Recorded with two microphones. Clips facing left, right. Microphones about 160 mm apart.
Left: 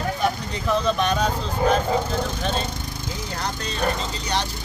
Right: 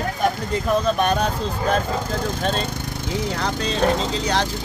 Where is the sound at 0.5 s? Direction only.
50° right (ahead or behind).